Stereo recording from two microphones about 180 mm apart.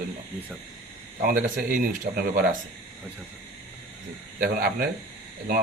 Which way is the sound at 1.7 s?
50° right (ahead or behind).